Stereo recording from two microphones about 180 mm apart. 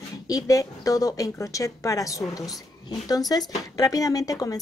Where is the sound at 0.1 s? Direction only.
20° left (ahead or behind).